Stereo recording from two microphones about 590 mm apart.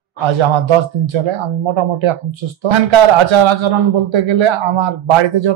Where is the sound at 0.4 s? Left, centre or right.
Right.